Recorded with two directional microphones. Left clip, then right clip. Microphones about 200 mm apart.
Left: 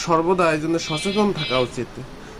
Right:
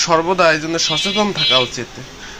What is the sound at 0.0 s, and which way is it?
Speech, 5° left (ahead or behind).